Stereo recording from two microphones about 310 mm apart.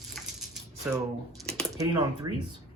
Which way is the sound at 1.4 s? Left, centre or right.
Centre.